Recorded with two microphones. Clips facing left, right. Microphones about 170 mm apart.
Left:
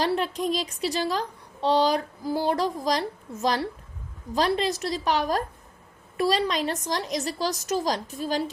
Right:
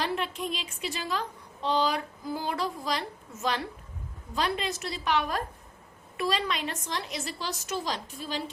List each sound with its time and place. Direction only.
0.0 s a woman's voice: 40° left (ahead or behind)